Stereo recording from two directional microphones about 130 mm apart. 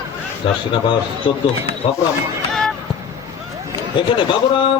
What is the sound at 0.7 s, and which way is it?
Speech, 40° left (ahead or behind).